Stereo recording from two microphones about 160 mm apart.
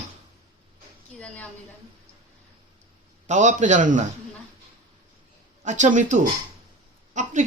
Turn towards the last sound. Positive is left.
turn(degrees=-50)  # may be behind; listen again after turning